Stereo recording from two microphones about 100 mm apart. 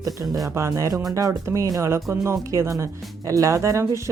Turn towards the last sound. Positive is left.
turn(degrees=-30)  # may be behind; listen again after turning